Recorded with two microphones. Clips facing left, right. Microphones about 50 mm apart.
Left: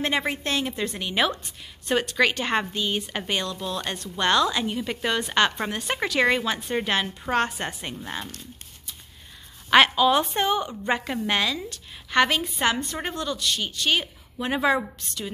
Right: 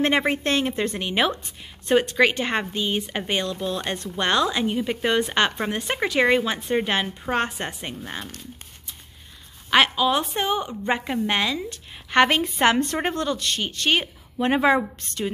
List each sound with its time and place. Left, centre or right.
0.0 s a woman's voice: right; by 8.0 s centre
8.0 s a woman's voice: centre
9.7 s a woman's voice: centre; by 14.9 s right
15.0 s speech: right